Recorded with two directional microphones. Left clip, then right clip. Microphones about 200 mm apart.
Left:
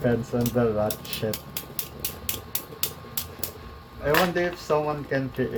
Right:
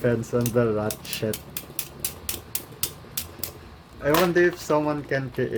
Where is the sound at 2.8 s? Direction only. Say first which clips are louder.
Even; 5° right (ahead or behind).